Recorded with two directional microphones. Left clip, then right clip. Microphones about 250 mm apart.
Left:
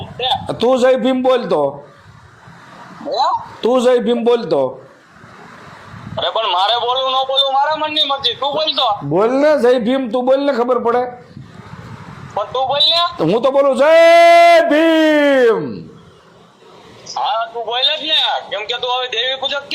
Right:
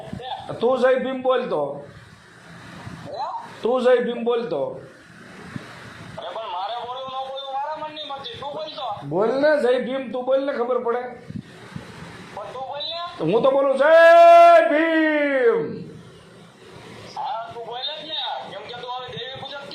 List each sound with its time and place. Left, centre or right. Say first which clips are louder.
0.2 s a man's voice: left 9 dB; left
3.1 s a man's voice: left 13 dB; left
6.1 s a man's voice: left 14 dB; left
12.5 s a man's voice: left 17 dB; left
17.2 s a sound: left 10 dB; left